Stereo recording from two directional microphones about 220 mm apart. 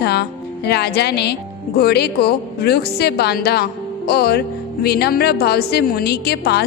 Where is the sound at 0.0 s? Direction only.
50° left (ahead or behind).